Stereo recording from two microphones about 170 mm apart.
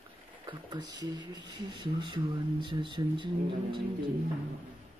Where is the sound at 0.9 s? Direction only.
25° right (ahead or behind).